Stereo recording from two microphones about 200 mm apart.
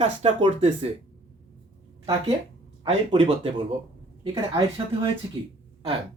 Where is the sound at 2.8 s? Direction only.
25° right (ahead or behind).